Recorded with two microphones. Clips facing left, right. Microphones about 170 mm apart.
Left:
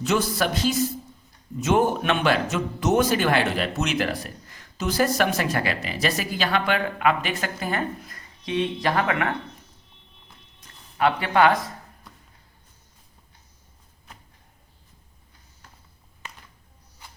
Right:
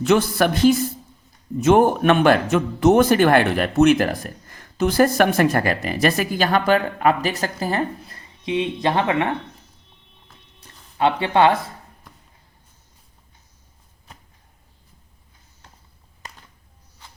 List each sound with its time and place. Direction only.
0.0 s speech: 60° right (ahead or behind); by 8.2 s 30° right (ahead or behind)
8.4 s speech: 20° right (ahead or behind)
10.6 s speech: 25° right (ahead or behind)